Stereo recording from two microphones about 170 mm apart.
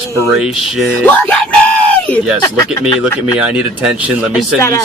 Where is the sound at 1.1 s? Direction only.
10° left (ahead or behind).